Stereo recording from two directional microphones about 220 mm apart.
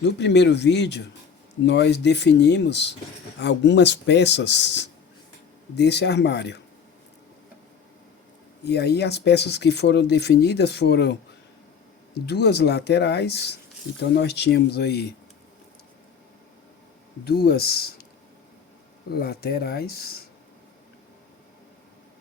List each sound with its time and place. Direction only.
0.0 s speech: 50° left (ahead or behind)
8.6 s speech: 50° left (ahead or behind)
12.2 s speech: 45° left (ahead or behind)
17.2 s speech: 45° left (ahead or behind)
19.1 s speech: 45° left (ahead or behind)